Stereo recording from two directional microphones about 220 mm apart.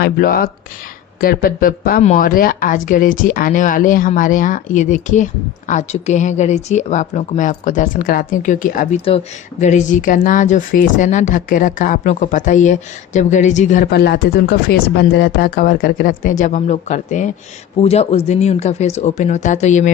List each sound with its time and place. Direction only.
0.0 s speech: 45° left (ahead or behind)
13.9 s speech: 50° left (ahead or behind)